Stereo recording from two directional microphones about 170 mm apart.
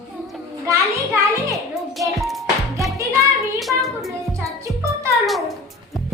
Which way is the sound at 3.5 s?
Centre (ahead or behind).